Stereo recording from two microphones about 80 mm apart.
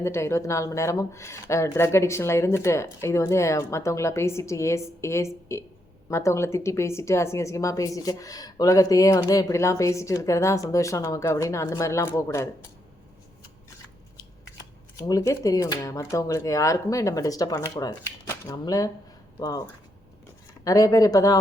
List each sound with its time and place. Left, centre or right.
0.0 s a woman's voice: left
14.9 s speech: left
20.7 s speech: left